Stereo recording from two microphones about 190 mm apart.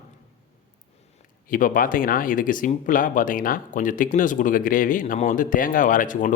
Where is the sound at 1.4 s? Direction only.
45° left (ahead or behind).